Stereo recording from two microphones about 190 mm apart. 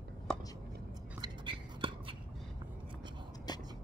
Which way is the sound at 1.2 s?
25° right (ahead or behind).